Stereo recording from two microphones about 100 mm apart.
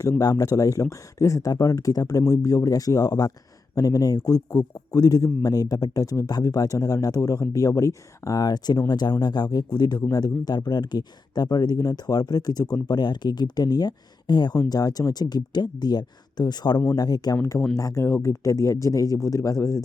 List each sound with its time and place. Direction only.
0.0 s a man's voice: 35° left (ahead or behind)